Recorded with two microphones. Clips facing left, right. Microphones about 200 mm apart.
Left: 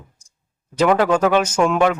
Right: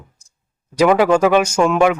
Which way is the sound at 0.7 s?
10° right (ahead or behind).